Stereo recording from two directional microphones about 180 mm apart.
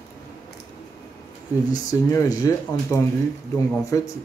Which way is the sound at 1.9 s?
20° left (ahead or behind).